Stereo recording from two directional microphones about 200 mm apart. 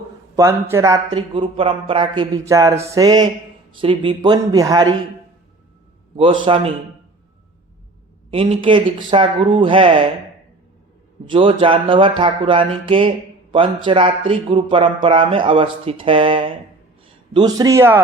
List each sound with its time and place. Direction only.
0.3 s speech: 15° right (ahead or behind)
6.1 s speech: 25° right (ahead or behind)
8.3 s speech: 30° right (ahead or behind)
11.3 s speech: 25° right (ahead or behind)